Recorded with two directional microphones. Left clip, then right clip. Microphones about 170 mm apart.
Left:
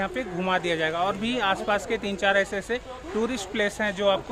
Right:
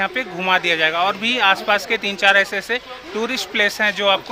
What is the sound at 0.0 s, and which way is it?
Speech, centre (ahead or behind).